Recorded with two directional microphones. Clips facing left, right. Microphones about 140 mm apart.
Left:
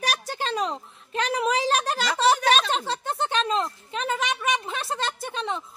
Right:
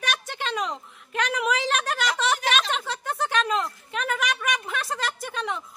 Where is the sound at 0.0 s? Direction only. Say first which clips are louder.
Left 2 dB; 35° left (ahead or behind).